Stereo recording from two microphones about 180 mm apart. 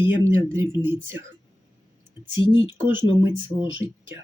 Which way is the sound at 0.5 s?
15° right (ahead or behind).